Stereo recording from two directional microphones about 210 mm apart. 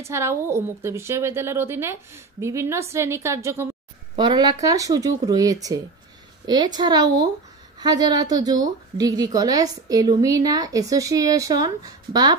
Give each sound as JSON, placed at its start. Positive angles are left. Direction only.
{"t": 0.0, "sound": "a woman's voice", "side_deg": -15}